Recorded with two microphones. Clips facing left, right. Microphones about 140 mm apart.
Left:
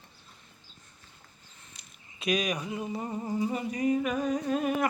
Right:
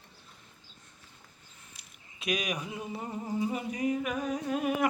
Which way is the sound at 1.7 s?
Centre (ahead or behind).